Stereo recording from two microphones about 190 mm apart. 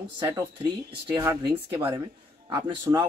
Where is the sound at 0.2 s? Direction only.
15° right (ahead or behind).